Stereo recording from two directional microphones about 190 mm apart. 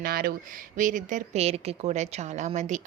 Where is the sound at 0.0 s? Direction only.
50° right (ahead or behind).